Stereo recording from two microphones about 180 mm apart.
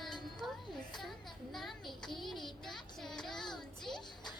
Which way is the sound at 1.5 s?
Centre (ahead or behind).